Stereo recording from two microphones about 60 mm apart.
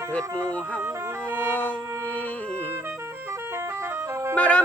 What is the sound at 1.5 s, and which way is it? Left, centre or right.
Speech, left.